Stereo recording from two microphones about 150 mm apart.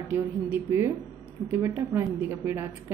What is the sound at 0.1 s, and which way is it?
A woman's voice, 15° right (ahead or behind).